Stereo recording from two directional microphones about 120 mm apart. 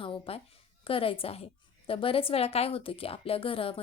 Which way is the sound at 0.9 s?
50° left (ahead or behind).